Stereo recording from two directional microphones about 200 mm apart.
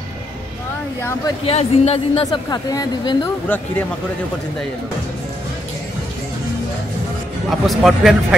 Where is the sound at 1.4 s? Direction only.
30° left (ahead or behind).